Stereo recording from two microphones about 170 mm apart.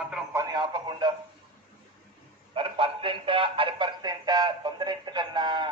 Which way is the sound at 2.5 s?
30° right (ahead or behind).